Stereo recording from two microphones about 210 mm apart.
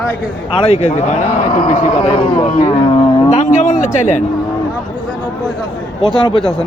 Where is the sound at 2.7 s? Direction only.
25° left (ahead or behind).